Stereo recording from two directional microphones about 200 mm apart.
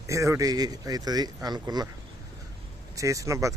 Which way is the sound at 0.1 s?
15° right (ahead or behind).